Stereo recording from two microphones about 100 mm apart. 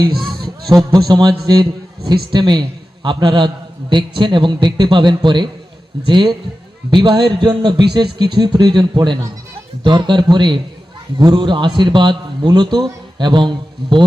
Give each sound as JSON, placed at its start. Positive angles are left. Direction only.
{"t": 0.9, "sound": "a man's voice", "side_deg": -40}